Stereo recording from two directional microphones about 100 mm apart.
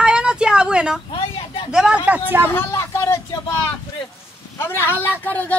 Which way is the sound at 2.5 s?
30° left (ahead or behind).